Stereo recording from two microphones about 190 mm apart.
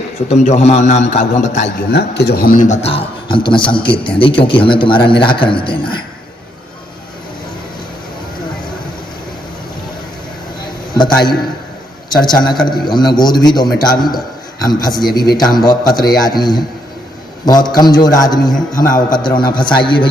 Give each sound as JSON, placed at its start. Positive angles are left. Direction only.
{"t": 0.3, "sound": "a man's voice", "side_deg": 35}
{"t": 1.9, "sound": "speech", "side_deg": 60}
{"t": 10.9, "sound": "a man's voice", "side_deg": 25}